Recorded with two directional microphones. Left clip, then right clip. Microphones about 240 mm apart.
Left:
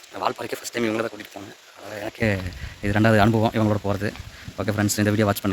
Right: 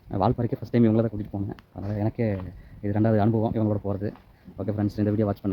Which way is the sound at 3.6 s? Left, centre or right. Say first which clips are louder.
Left 4 dB; centre.